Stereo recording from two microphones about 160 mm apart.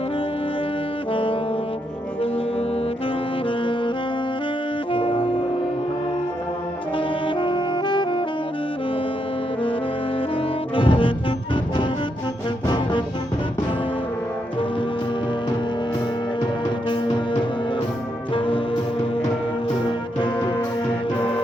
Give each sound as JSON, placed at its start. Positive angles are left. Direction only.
{"t": 1.1, "sound": "saxophone", "side_deg": 35}
{"t": 3.6, "sound": "saxophone", "side_deg": 30}
{"t": 4.9, "sound": "music", "side_deg": 35}
{"t": 6.9, "sound": "brass instrument", "side_deg": 30}
{"t": 10.8, "sound": "brass instrument", "side_deg": 30}
{"t": 12.6, "sound": "music", "side_deg": 30}
{"t": 18.3, "sound": "music", "side_deg": 30}